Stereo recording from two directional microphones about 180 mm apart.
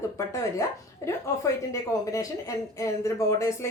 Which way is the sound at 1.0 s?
15° left (ahead or behind).